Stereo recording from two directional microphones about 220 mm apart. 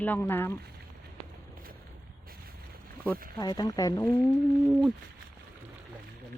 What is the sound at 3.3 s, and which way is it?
Speech, 20° left (ahead or behind).